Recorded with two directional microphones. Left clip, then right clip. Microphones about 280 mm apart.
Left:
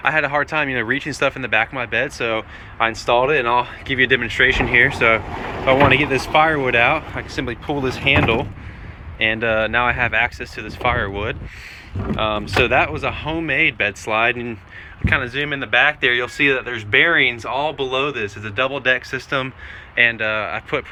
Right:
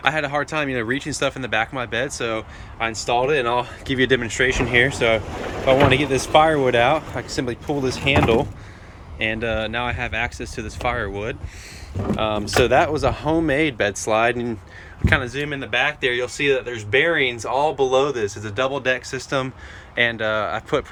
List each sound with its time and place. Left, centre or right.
0.0 s speech: centre